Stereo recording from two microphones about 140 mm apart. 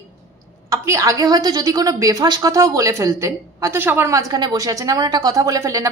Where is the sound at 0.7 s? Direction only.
20° right (ahead or behind).